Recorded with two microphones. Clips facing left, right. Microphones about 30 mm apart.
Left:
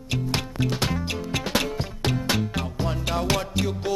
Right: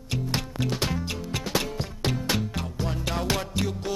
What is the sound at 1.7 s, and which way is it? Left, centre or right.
Music, centre.